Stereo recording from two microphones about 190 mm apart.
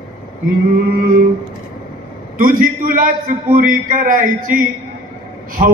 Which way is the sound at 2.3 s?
45° right (ahead or behind).